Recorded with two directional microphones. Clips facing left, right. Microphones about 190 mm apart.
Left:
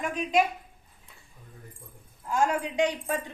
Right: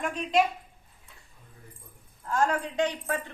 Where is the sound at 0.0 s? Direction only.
5° left (ahead or behind).